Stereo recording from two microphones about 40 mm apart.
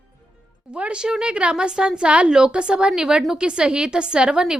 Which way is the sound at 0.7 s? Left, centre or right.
Right.